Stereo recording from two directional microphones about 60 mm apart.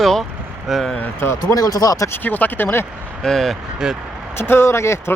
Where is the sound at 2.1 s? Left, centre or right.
Left.